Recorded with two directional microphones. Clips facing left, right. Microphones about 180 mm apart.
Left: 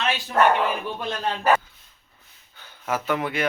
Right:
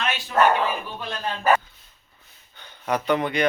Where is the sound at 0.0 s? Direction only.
35° left (ahead or behind).